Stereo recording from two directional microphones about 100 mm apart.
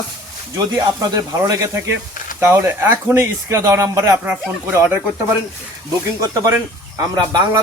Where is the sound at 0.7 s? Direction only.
35° right (ahead or behind).